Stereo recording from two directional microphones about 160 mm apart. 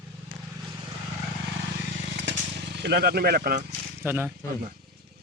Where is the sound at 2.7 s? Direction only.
90° right; by 3.6 s 70° right (ahead or behind).